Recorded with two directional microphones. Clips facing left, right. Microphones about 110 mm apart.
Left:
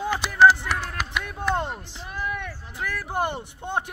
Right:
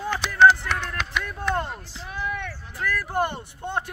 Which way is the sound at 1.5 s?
20° left (ahead or behind).